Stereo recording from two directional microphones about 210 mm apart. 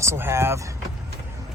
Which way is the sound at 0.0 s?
10° right (ahead or behind).